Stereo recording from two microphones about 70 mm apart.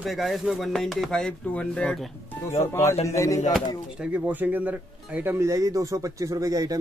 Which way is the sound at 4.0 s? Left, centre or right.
Right.